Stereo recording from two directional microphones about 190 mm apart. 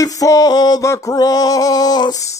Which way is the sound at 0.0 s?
20° left (ahead or behind).